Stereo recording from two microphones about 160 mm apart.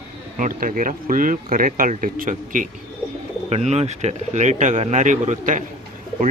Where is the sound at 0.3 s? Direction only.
55° right (ahead or behind).